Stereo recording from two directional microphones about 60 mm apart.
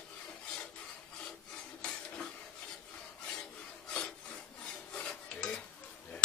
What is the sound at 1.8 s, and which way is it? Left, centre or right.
Dishes, centre.